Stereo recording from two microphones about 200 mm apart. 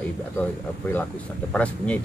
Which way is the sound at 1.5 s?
5° left (ahead or behind).